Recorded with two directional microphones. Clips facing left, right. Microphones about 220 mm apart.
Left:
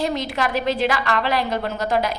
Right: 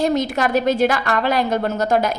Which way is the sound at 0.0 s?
45° right (ahead or behind).